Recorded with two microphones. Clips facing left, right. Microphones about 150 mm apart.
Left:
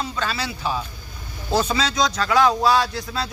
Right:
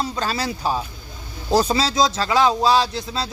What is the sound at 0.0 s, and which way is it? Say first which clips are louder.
A man's voice: right 3 dB; 40° right (ahead or behind).